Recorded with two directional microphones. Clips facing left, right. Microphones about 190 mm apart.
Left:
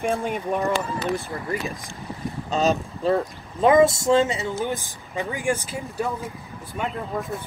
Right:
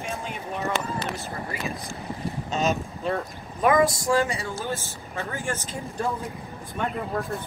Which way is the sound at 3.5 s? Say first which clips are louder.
Left 4 dB; 25° left (ahead or behind).